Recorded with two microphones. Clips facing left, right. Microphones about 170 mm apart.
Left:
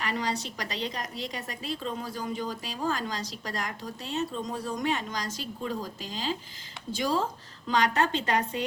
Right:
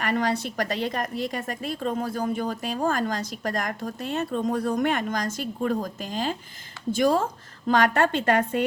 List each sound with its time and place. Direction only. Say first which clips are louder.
0.0 s a woman's voice: right 6 dB; 55° right (ahead or behind)